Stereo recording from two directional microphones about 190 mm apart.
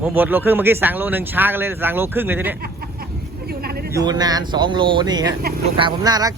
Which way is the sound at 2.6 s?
55° right (ahead or behind).